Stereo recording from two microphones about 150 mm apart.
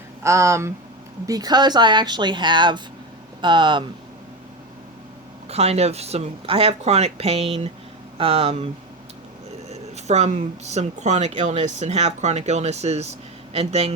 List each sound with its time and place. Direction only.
0.2 s speech: 20° right (ahead or behind)
5.5 s speech: 45° right (ahead or behind)
9.6 s speech: 45° right (ahead or behind)